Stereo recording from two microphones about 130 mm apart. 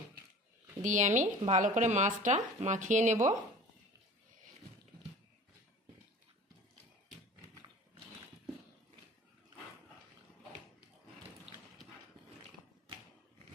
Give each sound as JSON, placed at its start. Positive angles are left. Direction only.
{"t": 0.8, "sound": "speech", "side_deg": -75}